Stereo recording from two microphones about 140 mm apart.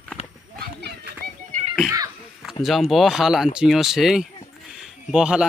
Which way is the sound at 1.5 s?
65° right (ahead or behind).